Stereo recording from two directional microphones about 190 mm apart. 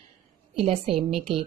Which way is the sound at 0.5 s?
30° right (ahead or behind).